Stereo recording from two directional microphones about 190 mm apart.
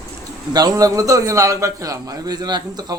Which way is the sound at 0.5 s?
20° right (ahead or behind).